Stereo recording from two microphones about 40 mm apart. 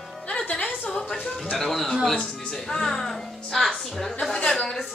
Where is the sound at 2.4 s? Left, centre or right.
Centre.